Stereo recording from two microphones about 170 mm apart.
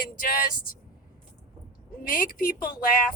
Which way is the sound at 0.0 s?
55° left (ahead or behind).